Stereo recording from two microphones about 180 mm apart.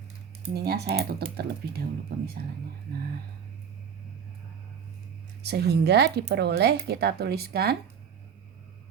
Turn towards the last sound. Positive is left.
turn(degrees=-60)  # may be behind; listen again after turning